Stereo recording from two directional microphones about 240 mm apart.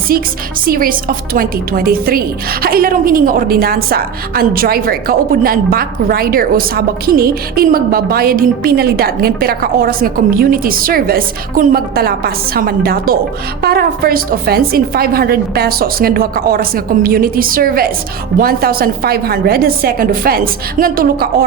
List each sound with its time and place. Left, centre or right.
0.6 s a woman's voice: right